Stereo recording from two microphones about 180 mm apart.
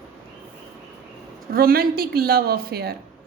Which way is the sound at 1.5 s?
55° right (ahead or behind).